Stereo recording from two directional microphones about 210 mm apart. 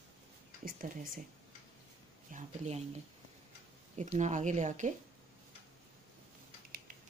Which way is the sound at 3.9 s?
35° right (ahead or behind).